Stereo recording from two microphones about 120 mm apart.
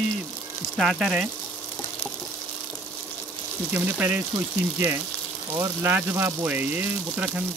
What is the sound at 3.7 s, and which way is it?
Speech, 15° right (ahead or behind).